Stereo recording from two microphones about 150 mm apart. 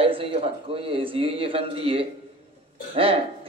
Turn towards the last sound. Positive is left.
turn(degrees=-40)  # may be behind; listen again after turning